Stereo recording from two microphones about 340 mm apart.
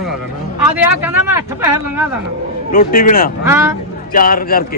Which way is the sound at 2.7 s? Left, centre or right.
Left.